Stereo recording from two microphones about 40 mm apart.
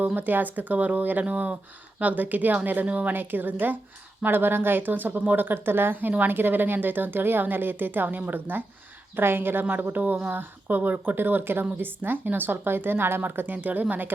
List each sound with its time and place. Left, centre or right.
0.0 s speech: right
1.2 s speech: right
2.0 s speech: right
3.1 s speech: right
9.1 s speech: right